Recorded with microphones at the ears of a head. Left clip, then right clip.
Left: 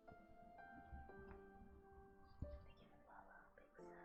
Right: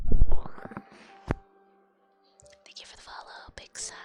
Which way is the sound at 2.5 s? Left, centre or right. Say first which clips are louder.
Right 17 dB; right.